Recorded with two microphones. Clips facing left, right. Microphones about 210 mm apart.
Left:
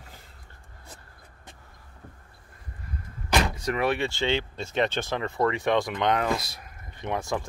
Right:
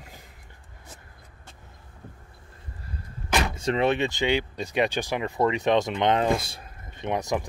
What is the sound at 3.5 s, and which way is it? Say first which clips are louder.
Speech: right 3 dB; 25° right (ahead or behind).